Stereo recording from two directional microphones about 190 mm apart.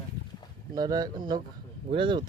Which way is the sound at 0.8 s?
20° right (ahead or behind).